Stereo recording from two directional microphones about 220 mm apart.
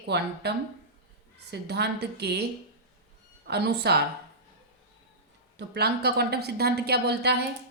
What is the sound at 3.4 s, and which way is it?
Speech, 50° right (ahead or behind).